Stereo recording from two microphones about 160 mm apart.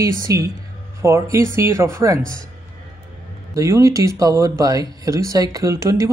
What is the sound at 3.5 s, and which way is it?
Speech, 20° right (ahead or behind).